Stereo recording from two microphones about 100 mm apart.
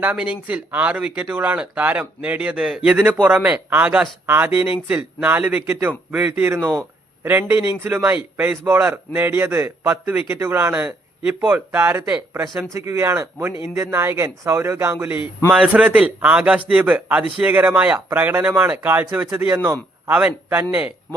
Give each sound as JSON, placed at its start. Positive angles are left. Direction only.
{"t": 0.0, "sound": "a man's voice", "side_deg": -15}
{"t": 8.1, "sound": "speech", "side_deg": -10}
{"t": 8.6, "sound": "a man's voice", "side_deg": -20}
{"t": 11.3, "sound": "a man's voice", "side_deg": -15}
{"t": 15.4, "sound": "a man's voice", "side_deg": -10}